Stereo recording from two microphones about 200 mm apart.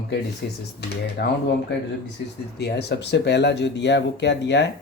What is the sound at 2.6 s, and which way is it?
Speech, 55° left (ahead or behind).